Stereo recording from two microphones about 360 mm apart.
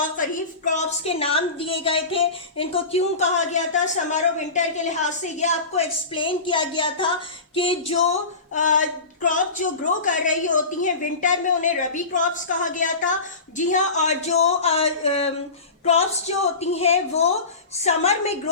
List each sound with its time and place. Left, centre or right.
0.2 s a woman's voice: left